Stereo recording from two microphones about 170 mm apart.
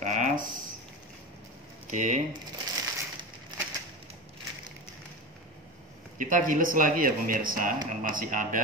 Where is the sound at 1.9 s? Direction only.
50° right (ahead or behind).